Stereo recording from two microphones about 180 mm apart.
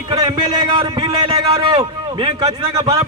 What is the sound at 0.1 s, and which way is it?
A man's voice, 25° right (ahead or behind).